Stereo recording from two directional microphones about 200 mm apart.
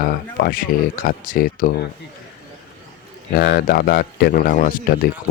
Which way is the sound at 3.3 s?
50° left (ahead or behind).